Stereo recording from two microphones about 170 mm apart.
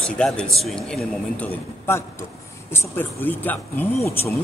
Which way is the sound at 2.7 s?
15° left (ahead or behind).